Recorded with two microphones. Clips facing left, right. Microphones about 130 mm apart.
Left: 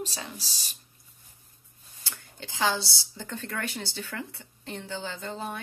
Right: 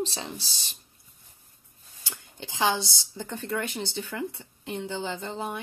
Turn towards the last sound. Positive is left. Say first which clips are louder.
# right 2 dB
turn(degrees=-15)  # may be behind; listen again after turning